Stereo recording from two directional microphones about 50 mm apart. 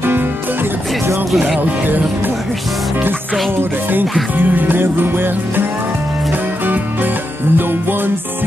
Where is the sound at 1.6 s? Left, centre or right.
Right.